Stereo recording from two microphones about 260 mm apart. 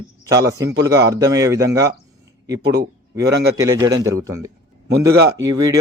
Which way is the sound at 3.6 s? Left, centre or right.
Centre.